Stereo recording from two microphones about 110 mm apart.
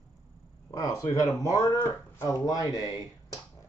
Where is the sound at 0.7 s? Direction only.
35° left (ahead or behind).